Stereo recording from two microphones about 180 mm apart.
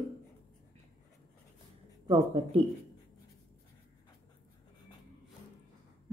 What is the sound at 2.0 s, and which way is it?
Speech, 30° right (ahead or behind).